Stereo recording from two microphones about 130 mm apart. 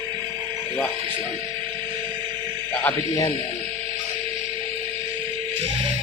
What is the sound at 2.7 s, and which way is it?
Speech, 15° left (ahead or behind).